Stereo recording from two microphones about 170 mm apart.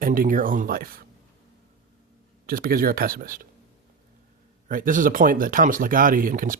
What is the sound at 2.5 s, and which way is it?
Speech, 60° right (ahead or behind).